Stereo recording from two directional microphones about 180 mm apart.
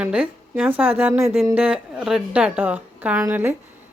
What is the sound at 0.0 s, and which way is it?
Speech, 5° right (ahead or behind).